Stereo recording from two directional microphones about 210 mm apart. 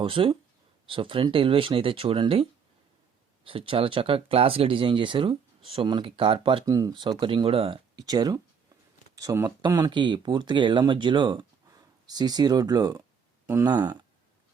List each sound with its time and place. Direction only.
0.0 s speech: 25° right (ahead or behind)